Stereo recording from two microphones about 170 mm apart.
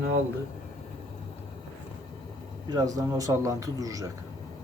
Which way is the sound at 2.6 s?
20° right (ahead or behind).